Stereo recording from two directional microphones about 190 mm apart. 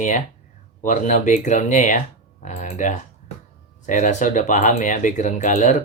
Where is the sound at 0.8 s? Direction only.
40° left (ahead or behind).